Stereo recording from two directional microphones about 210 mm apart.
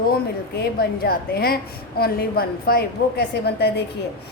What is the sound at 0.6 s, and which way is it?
A woman's voice, 45° left (ahead or behind).